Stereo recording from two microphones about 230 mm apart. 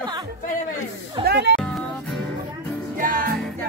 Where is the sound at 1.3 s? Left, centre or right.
Right.